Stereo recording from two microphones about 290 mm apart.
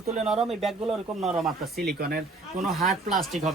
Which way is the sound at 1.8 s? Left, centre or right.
Right.